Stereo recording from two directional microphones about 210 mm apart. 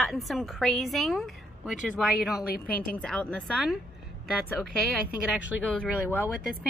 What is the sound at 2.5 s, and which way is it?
Speech, 45° left (ahead or behind).